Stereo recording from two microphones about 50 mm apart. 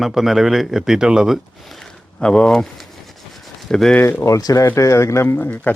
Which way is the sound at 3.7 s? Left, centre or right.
Centre.